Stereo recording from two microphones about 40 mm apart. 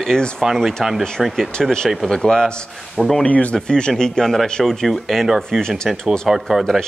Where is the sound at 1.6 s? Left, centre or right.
Centre.